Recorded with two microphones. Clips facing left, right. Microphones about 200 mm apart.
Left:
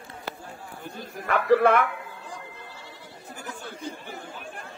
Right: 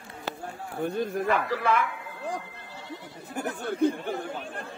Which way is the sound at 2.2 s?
60° right (ahead or behind).